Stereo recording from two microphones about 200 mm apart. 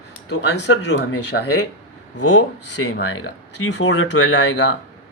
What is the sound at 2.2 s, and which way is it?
Speech, 75° left (ahead or behind).